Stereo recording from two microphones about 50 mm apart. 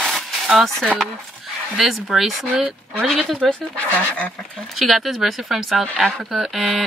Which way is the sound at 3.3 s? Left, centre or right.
Centre.